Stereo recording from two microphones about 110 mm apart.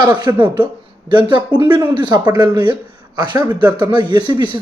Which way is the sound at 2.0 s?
40° right (ahead or behind).